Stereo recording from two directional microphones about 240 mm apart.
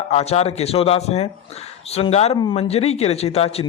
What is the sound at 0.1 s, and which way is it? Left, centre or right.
A man's voice, left.